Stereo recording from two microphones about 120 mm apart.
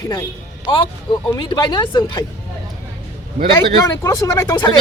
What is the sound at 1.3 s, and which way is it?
Speech, 35° left (ahead or behind).